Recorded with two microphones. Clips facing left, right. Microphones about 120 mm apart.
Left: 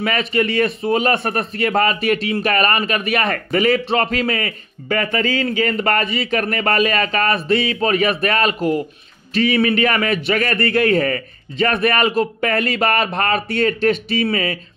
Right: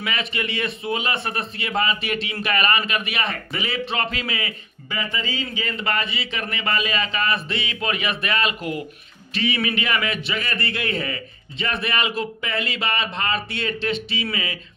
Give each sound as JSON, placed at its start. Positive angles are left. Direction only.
{"t": 0.0, "sound": "speech", "side_deg": 45}